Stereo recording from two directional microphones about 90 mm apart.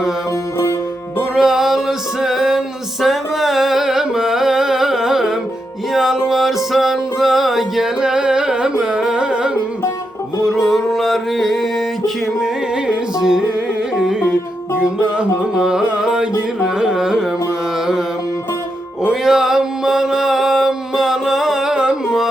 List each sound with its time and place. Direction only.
1.4 s music: 5° right (ahead or behind)
14.2 s music: 25° left (ahead or behind)
14.8 s music: 10° right (ahead or behind)
16.6 s carnatic music: 5° right (ahead or behind)
19.0 s mantra: 5° right (ahead or behind)